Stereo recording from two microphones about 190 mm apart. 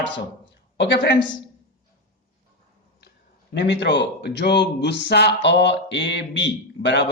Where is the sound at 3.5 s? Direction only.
65° left (ahead or behind).